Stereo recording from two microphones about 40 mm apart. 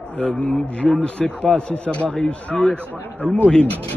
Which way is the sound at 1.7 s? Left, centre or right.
Left.